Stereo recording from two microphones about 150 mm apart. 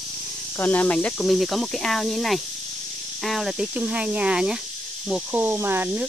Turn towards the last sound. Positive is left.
turn(degrees=-15)  # may be behind; listen again after turning